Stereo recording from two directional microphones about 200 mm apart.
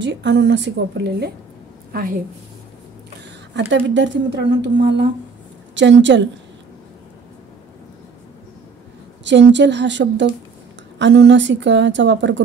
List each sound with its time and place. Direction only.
0.0 s speech: 60° right (ahead or behind)
1.9 s a woman's voice: 45° right (ahead or behind)
3.5 s speech: 65° right (ahead or behind)
9.2 s speech: 60° right (ahead or behind)